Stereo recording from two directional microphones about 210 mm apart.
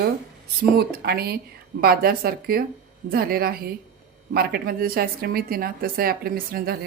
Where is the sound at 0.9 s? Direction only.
45° right (ahead or behind).